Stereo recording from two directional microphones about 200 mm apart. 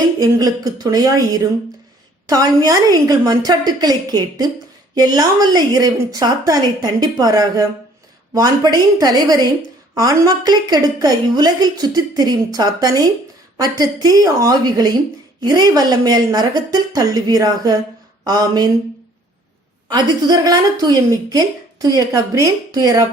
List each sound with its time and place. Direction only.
0.2 s a woman's voice: 20° right (ahead or behind)
19.9 s a woman's voice: 20° right (ahead or behind)